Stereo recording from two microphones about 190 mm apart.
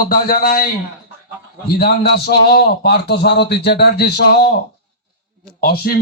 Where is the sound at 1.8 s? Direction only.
55° left (ahead or behind).